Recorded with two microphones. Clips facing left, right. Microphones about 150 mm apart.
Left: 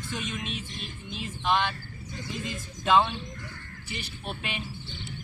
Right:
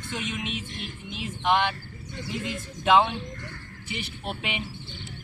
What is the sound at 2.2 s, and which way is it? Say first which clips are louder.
Speech: right 3 dB; 70° right (ahead or behind).